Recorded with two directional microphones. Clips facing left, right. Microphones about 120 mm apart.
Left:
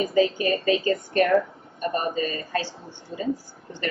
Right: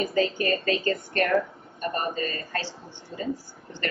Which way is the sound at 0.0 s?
15° left (ahead or behind).